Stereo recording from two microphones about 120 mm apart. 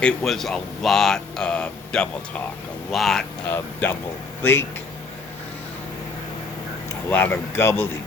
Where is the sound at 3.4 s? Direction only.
15° left (ahead or behind).